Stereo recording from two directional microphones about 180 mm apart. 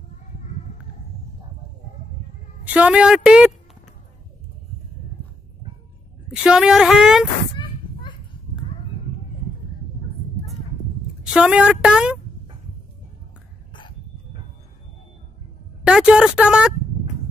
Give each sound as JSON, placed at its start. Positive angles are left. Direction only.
{"t": 2.6, "sound": "a woman's voice", "side_deg": -5}
{"t": 6.3, "sound": "a woman's voice", "side_deg": -5}
{"t": 7.5, "sound": "a sound", "side_deg": 25}
{"t": 11.3, "sound": "a woman's voice", "side_deg": -5}
{"t": 15.8, "sound": "a woman's voice", "side_deg": -5}